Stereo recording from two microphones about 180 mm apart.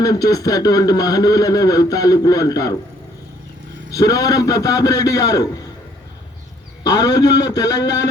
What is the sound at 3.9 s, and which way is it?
A man's voice, 20° left (ahead or behind).